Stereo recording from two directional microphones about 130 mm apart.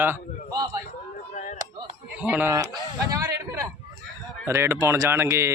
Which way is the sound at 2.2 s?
10° right (ahead or behind).